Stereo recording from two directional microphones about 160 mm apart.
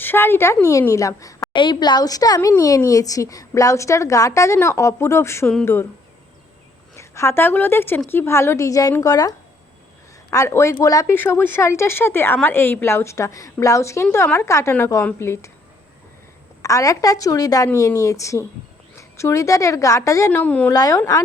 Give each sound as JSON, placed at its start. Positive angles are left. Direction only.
{"t": 0.0, "sound": "a woman's voice", "side_deg": 15}
{"t": 6.9, "sound": "speech", "side_deg": 20}
{"t": 16.6, "sound": "a woman's voice", "side_deg": 20}
{"t": 20.7, "sound": "a woman's voice", "side_deg": 20}